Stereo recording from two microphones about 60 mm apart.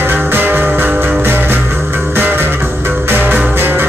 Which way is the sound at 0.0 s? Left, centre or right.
Right.